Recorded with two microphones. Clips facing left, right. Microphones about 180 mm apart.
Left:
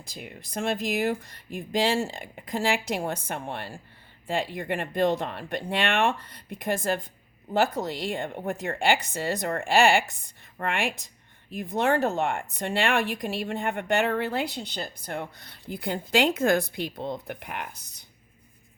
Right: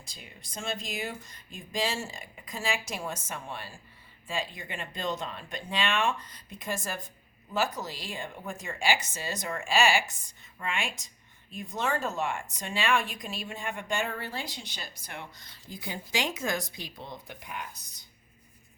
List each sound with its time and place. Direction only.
0.2 s speech: 60° left (ahead or behind)